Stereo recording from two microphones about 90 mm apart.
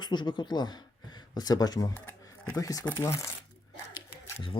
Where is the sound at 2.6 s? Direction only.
40° left (ahead or behind).